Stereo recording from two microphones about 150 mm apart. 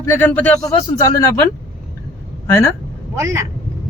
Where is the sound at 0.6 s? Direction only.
20° left (ahead or behind).